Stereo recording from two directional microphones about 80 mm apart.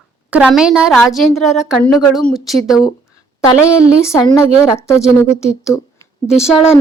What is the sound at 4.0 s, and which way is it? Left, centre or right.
Speech, left.